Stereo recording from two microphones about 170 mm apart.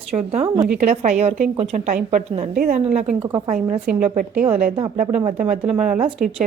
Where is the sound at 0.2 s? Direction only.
40° right (ahead or behind).